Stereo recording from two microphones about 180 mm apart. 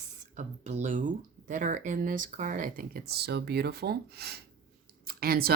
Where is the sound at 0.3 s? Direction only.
40° right (ahead or behind).